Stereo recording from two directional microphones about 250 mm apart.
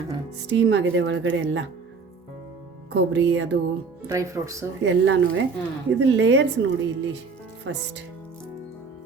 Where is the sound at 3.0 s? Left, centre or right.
Right.